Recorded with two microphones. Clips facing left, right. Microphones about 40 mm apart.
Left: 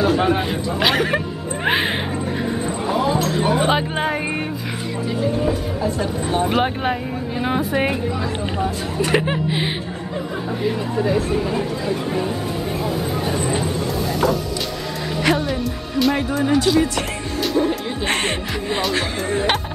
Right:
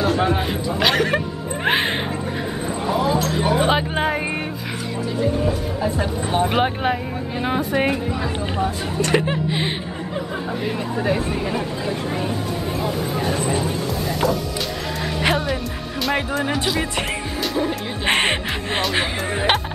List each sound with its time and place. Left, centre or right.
0.0 s speech: centre
6.3 s speech: centre
11.8 s speech: centre
14.2 s speech: centre
16.4 s speech: centre
17.4 s music: centre
18.0 s speech: right